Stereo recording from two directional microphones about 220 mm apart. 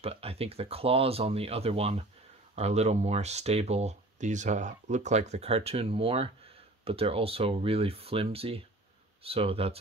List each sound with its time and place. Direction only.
0.0 s speech: 25° right (ahead or behind)